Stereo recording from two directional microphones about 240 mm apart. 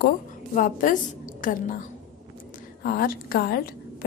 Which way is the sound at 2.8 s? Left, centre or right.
Left.